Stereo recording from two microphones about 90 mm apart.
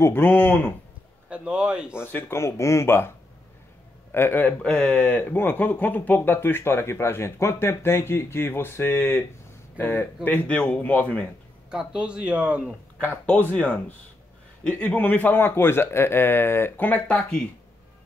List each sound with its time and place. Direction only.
0.0 s speech: 25° left (ahead or behind)
1.3 s speech: 10° right (ahead or behind)
2.0 s speech: 25° left (ahead or behind)
4.1 s a man's voice: 25° left (ahead or behind)
11.7 s speech: 10° right (ahead or behind)
13.0 s a man's voice: 20° left (ahead or behind)